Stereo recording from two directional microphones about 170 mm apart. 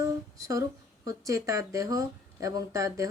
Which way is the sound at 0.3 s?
20° right (ahead or behind).